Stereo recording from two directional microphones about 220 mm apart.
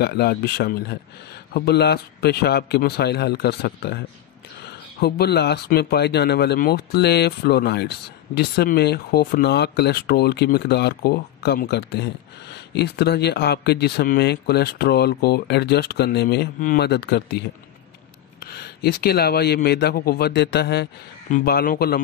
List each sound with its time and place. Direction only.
0.0 s speech: 45° left (ahead or behind)
5.0 s speech: 45° left (ahead or behind)